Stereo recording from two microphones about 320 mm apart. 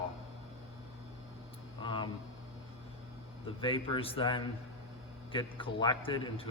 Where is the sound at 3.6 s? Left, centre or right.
Centre.